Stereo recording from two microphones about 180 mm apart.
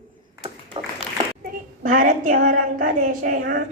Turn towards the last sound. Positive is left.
turn(degrees=-45)  # may be behind; listen again after turning